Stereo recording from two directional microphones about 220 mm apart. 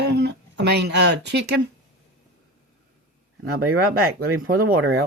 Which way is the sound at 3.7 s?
75° right (ahead or behind).